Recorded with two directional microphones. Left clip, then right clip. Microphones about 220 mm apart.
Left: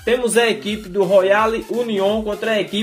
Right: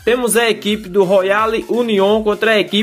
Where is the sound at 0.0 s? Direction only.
25° right (ahead or behind).